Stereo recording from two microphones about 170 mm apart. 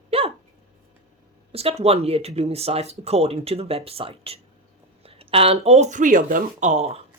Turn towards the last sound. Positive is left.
turn(degrees=-40)  # may be behind; listen again after turning